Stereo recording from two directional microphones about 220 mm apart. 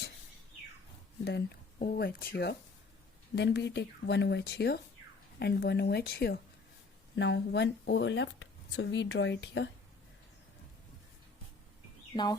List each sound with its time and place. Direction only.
1.2 s speech: 50° left (ahead or behind)